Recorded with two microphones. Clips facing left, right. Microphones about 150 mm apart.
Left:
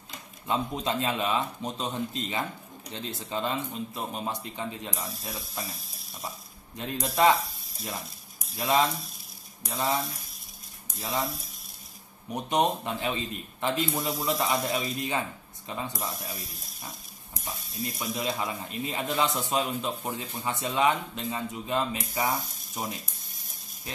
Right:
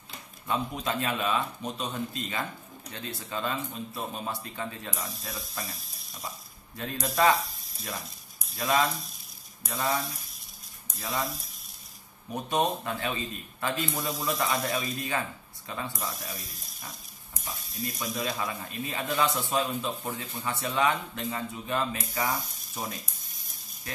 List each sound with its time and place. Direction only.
0.5 s a man's voice: 25° left (ahead or behind)
4.9 s speech: centre (ahead or behind)
6.8 s a man's voice: 20° left (ahead or behind)
8.5 s a man's voice: 25° left (ahead or behind)
12.3 s a man's voice: 20° left (ahead or behind)
15.9 s speech: centre (ahead or behind)
18.1 s a man's voice: 20° left (ahead or behind)